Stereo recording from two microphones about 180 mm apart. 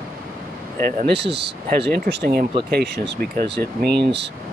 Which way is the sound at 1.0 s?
70° right (ahead or behind).